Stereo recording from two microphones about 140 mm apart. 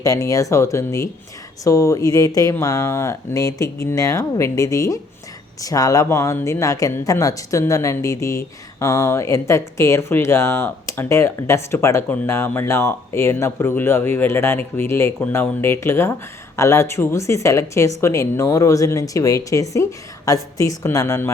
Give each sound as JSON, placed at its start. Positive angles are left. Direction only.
{"t": 0.0, "sound": "speech", "side_deg": 25}